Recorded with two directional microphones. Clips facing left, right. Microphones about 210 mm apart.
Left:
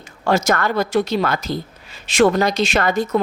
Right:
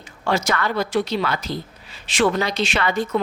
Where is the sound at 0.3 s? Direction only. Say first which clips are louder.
Left 4 dB; 45° left (ahead or behind).